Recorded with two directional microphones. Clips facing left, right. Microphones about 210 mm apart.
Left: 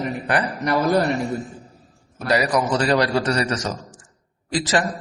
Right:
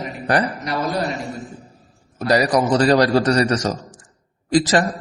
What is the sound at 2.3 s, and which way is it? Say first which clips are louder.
A man's voice: right 3 dB; 40° right (ahead or behind).